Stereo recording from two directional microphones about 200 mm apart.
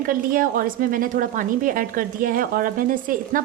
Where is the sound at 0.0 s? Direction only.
45° right (ahead or behind).